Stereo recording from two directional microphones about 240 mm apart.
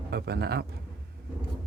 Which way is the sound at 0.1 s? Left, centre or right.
Right.